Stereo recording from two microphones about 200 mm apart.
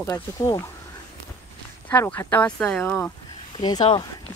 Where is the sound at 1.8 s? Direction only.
10° left (ahead or behind).